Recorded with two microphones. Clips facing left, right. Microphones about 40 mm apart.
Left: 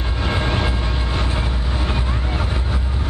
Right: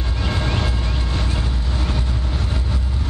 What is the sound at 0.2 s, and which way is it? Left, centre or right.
Vehicle, centre.